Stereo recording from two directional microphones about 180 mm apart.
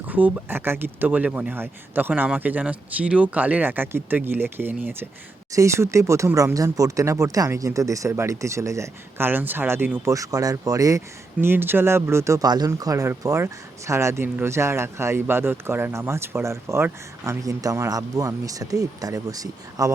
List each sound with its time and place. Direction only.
0.1 s speech: 10° right (ahead or behind)